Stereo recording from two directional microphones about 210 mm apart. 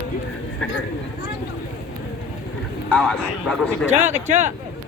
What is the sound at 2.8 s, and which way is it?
A man's voice, 5° left (ahead or behind).